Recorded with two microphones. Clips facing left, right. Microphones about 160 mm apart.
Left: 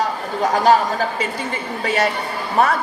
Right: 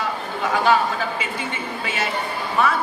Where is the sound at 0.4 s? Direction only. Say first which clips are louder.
Left 4 dB; 40° left (ahead or behind).